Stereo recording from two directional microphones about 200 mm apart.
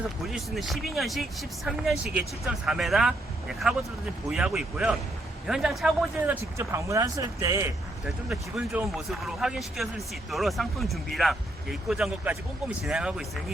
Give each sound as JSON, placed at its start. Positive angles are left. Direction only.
{"t": 0.2, "sound": "speech", "side_deg": 0}
{"t": 4.3, "sound": "speech", "side_deg": -5}
{"t": 6.6, "sound": "speech", "side_deg": -15}
{"t": 8.0, "sound": "speech", "side_deg": 0}